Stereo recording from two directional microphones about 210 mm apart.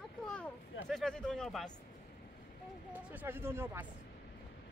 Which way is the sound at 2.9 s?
10° right (ahead or behind).